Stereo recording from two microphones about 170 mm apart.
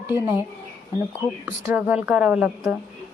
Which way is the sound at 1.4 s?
10° right (ahead or behind).